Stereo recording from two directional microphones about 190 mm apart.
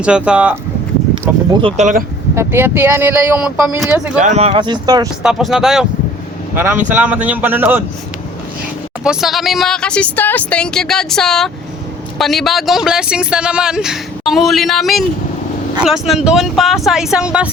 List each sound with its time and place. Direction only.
0.0 s speech: 5° right (ahead or behind)
1.6 s speech: 40° right (ahead or behind)
2.3 s speech: 15° right (ahead or behind)
4.2 s speech: 35° right (ahead or behind); by 5.0 s 20° right (ahead or behind)
5.2 s speech: centre (ahead or behind)
9.0 s speech: centre (ahead or behind)